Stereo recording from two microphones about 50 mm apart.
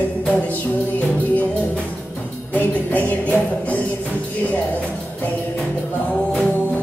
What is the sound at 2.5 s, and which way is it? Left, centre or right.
Music, left.